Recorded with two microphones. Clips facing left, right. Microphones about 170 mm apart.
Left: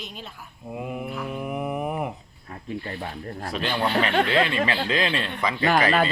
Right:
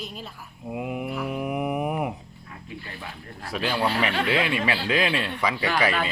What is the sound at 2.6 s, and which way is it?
Speech, 40° left (ahead or behind).